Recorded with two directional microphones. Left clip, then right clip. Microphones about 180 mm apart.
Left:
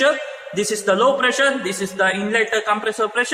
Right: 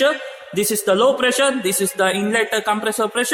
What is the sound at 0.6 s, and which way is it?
A man's voice, 70° right (ahead or behind).